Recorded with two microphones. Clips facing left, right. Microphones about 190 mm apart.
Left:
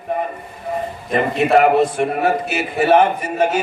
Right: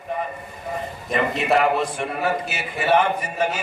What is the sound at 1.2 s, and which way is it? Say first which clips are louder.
A man's voice: left 6 dB; 50° left (ahead or behind).